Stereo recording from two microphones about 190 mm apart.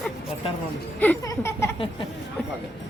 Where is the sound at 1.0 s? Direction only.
10° left (ahead or behind).